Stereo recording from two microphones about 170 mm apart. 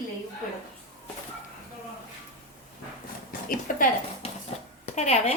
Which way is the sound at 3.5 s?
55° left (ahead or behind).